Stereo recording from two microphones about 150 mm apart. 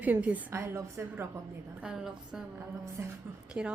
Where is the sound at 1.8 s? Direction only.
5° right (ahead or behind).